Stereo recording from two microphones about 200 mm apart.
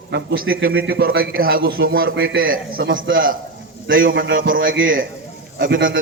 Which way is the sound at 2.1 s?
80° right.